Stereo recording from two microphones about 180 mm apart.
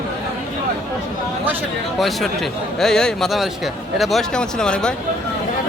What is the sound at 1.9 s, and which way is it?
A man's voice, centre (ahead or behind).